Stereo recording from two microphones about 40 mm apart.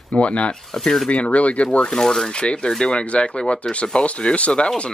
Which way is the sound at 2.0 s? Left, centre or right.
Centre.